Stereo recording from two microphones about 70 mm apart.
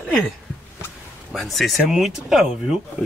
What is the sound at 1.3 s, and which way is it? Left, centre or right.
Speech, centre.